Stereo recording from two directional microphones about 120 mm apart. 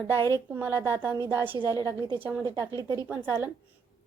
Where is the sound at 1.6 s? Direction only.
25° left (ahead or behind).